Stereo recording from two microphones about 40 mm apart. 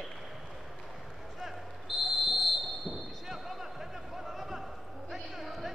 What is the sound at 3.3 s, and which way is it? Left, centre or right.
Basketball bounce, centre.